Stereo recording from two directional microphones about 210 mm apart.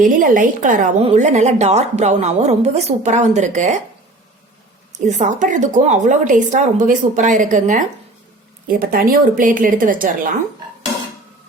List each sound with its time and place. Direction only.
0.0 s speech: 40° right (ahead or behind)
4.9 s speech: 35° right (ahead or behind)